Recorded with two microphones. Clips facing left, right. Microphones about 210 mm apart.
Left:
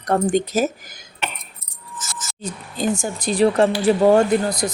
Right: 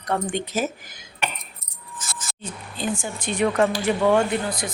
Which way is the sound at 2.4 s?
40° left (ahead or behind).